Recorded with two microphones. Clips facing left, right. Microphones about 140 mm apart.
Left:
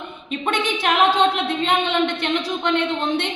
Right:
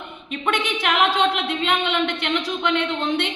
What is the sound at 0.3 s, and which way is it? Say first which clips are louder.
A woman's voice: left 1 dB; 30° left (ahead or behind).